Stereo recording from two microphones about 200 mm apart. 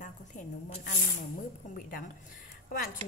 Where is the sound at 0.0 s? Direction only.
35° left (ahead or behind).